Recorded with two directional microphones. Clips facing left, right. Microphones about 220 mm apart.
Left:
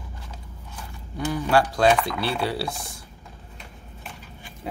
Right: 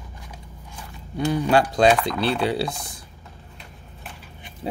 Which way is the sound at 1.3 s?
20° right (ahead or behind).